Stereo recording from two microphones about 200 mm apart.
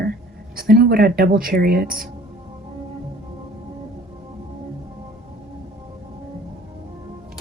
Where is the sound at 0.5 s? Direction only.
50° right (ahead or behind).